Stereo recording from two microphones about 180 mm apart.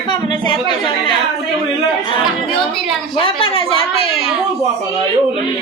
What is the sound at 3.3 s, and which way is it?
Speech, 30° left (ahead or behind).